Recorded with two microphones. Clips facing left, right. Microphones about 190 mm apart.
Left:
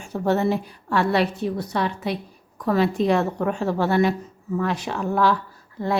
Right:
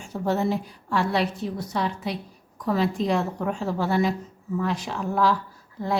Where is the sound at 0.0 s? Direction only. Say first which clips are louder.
Left 3 dB; 65° left (ahead or behind).